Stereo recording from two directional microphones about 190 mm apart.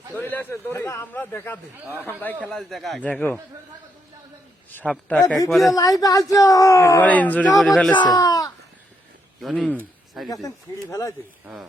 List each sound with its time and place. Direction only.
0.1 s a man's voice: 10° left (ahead or behind)
4.7 s a man's voice: 10° left (ahead or behind)
5.7 s a man's voice: 20° left (ahead or behind); by 7.9 s 5° left (ahead or behind)
7.9 s speech: 20° left (ahead or behind)
9.4 s speech: centre (ahead or behind)
10.2 s speech: 20° left (ahead or behind)